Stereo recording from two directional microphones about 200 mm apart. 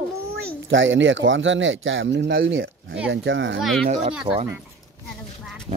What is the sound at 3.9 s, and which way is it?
Speech, 35° right (ahead or behind).